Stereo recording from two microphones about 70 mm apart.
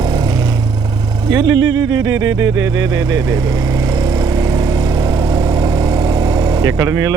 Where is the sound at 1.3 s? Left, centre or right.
Right.